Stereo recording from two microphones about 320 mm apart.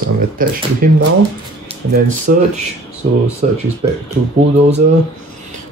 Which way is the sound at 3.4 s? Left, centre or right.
Right.